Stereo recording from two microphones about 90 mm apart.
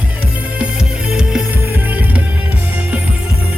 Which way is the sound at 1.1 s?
10° right (ahead or behind).